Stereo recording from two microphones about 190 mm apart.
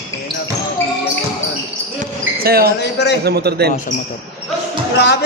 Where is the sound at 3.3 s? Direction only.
60° right (ahead or behind).